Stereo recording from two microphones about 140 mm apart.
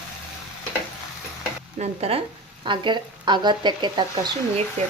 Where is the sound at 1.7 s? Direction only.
45° right (ahead or behind).